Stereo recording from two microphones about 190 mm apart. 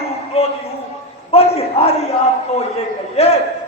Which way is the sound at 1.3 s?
30° left (ahead or behind).